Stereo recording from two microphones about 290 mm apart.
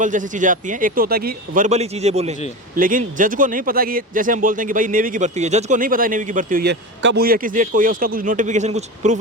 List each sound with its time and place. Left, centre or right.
0.0 s speech: right